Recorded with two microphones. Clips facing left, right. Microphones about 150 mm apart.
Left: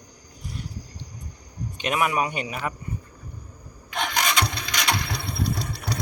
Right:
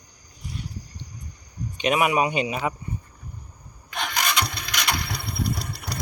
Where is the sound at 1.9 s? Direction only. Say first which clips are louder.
Right 3 dB; 15° right (ahead or behind).